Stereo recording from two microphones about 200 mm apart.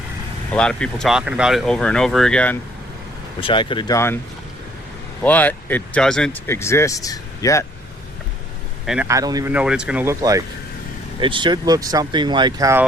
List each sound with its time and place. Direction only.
0.5 s speech: 5° left (ahead or behind)
3.4 s speech: 25° left (ahead or behind)
5.2 s speech: 10° left (ahead or behind)
9.0 s speech: 15° right (ahead or behind)
9.5 s speech: 5° right (ahead or behind)